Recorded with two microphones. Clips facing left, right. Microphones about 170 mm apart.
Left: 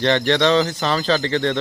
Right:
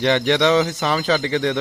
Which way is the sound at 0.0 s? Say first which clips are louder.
Even; 10° right (ahead or behind).